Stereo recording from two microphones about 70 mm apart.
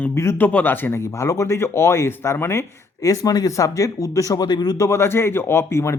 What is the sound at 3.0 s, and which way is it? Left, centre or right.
Speech, left.